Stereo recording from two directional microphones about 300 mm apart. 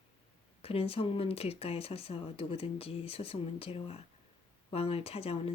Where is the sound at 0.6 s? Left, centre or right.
Centre.